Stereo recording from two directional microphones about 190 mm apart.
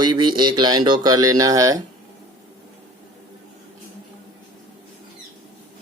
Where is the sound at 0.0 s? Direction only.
25° right (ahead or behind).